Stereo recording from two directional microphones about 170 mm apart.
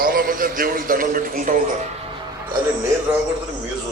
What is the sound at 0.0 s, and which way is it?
A man's voice, 60° right (ahead or behind).